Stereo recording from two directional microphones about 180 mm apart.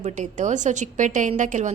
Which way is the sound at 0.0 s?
45° right (ahead or behind).